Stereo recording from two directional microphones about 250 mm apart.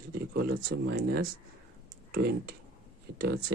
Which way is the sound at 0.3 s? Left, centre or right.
Right.